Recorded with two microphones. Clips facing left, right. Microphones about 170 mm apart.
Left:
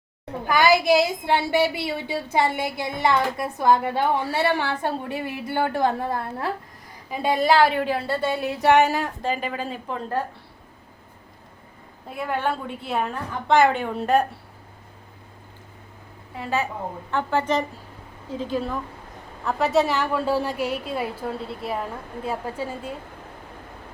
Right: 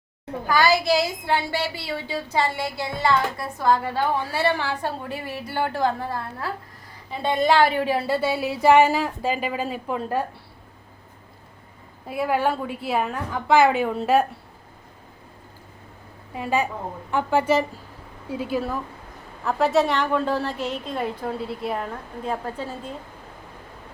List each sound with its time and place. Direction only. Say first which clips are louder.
0.4 s a woman's voice: left 2 dB; 20° left (ahead or behind)
7.1 s a woman's voice: even; 10° left (ahead or behind)
7.9 s speech: right 2 dB; 10° right (ahead or behind)
12.0 s a woman's voice: right 3 dB; 5° right (ahead or behind)
16.3 s a woman's voice: right 2 dB; 15° right (ahead or behind); by 22.9 s 10° left (ahead or behind)